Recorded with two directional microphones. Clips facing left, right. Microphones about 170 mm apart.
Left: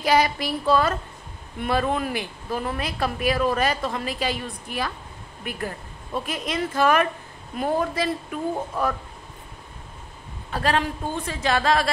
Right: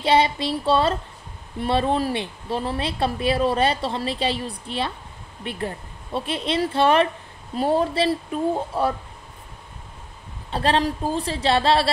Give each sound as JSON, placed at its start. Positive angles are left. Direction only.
{"t": 0.0, "sound": "speech", "side_deg": -30}
{"t": 10.5, "sound": "speech", "side_deg": -30}